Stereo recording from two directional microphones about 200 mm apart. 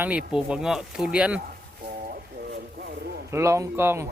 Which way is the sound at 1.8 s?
45° right (ahead or behind).